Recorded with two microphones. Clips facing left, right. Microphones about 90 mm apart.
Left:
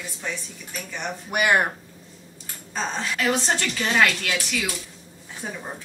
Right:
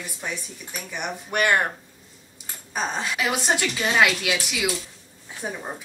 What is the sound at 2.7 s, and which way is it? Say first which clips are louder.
A woman's voice: right 1 dB; 15° right (ahead or behind).